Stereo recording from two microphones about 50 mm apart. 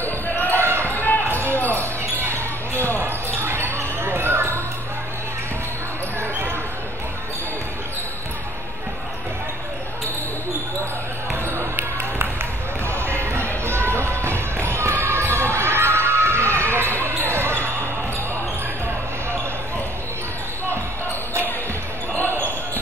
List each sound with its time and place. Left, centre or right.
0.5 s basketball bounce: right
0.9 s basketball bounce: left
2.3 s basketball bounce: right
12.0 s basketball bounce: right
13.7 s music: right
16.3 s basketball bounce: left
16.6 s basketball bounce: right